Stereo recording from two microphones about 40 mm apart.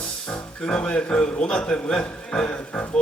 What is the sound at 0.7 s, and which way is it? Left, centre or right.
Music, left.